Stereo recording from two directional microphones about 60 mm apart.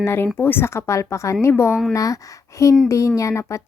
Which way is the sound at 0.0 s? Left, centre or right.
Left.